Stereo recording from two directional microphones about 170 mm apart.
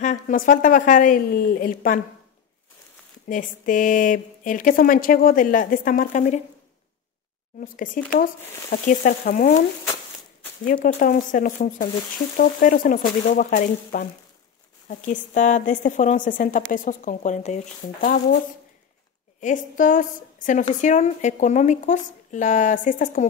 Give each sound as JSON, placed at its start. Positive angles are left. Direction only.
{"t": 0.0, "sound": "a woman's voice", "side_deg": 50}
{"t": 3.3, "sound": "a woman's voice", "side_deg": 50}
{"t": 7.6, "sound": "a woman's voice", "side_deg": 55}
{"t": 10.6, "sound": "a woman's voice", "side_deg": 55}
{"t": 19.4, "sound": "a woman's voice", "side_deg": 50}